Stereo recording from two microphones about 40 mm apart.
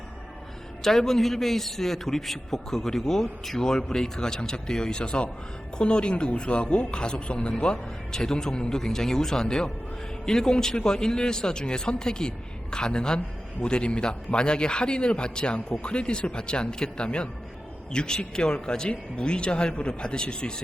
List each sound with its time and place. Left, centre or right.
0.8 s a man's voice: centre